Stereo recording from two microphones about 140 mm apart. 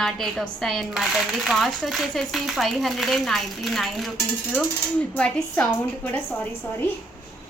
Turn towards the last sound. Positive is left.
turn(degrees=10)  # may be behind; listen again after turning